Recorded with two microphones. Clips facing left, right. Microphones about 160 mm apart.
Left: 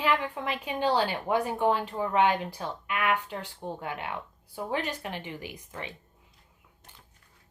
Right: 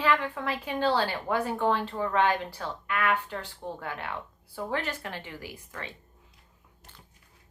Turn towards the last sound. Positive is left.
turn(degrees=20)  # may be behind; listen again after turning